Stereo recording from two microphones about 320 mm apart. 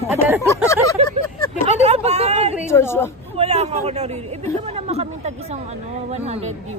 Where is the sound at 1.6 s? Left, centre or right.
Right.